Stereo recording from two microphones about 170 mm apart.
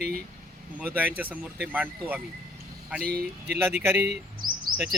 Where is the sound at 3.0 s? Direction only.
65° right (ahead or behind).